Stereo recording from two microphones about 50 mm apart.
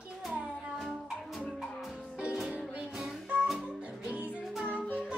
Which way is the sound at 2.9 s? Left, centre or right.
Centre.